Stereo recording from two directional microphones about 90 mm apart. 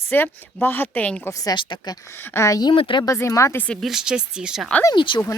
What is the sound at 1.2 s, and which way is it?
Speech, 40° left (ahead or behind).